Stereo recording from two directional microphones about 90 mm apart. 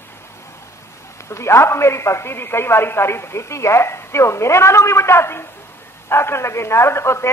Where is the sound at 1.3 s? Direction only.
30° left (ahead or behind).